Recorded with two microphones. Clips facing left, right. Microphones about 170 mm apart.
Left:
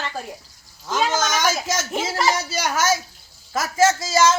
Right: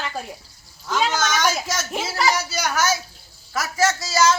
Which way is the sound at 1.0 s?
15° left (ahead or behind).